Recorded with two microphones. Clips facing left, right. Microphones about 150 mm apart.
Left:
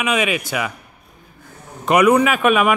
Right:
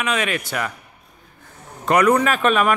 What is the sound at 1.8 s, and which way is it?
Speech, 15° left (ahead or behind).